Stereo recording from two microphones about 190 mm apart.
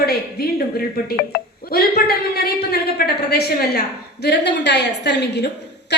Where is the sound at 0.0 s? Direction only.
55° left (ahead or behind).